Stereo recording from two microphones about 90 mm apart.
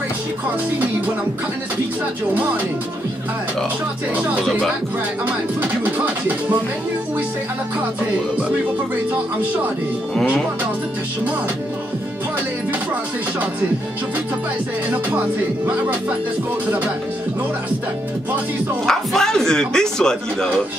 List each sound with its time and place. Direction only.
14.9 s speech: 15° right (ahead or behind)
18.9 s speech: 5° left (ahead or behind)